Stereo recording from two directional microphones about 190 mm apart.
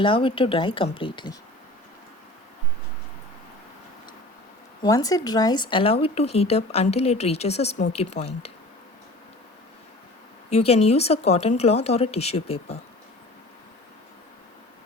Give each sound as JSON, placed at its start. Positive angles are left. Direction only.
{"t": 0.0, "sound": "speech", "side_deg": 30}
{"t": 4.8, "sound": "speech", "side_deg": 20}
{"t": 10.5, "sound": "speech", "side_deg": 35}